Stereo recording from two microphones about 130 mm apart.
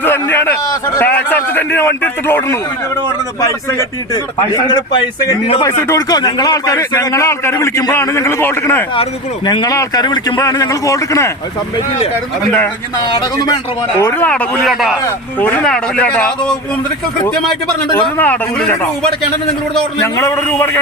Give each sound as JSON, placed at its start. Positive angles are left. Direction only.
{"t": 0.0, "sound": "a man's voice", "side_deg": 15}
{"t": 5.6, "sound": "a man's voice", "side_deg": 25}
{"t": 9.5, "sound": "a man's voice", "side_deg": 30}
{"t": 13.0, "sound": "speech", "side_deg": 35}
{"t": 14.0, "sound": "a man's voice", "side_deg": 15}
{"t": 15.0, "sound": "a man's voice", "side_deg": 15}
{"t": 18.2, "sound": "a man's voice", "side_deg": 15}
{"t": 20.1, "sound": "a man's voice", "side_deg": 25}